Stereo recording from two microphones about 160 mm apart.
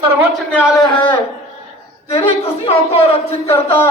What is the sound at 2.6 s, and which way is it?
Speech, 35° left (ahead or behind).